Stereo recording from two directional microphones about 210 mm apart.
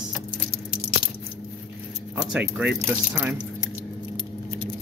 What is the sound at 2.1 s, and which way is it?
Speech, 5° right (ahead or behind).